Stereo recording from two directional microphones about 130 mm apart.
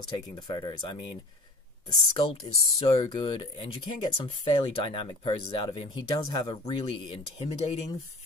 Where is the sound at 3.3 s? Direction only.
40° left (ahead or behind).